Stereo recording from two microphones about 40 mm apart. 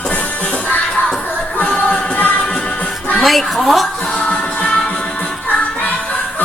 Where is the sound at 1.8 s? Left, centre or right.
Left.